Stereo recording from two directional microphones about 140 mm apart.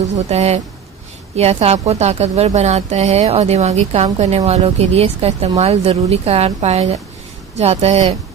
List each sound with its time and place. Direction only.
0.1 s speech: 50° right (ahead or behind)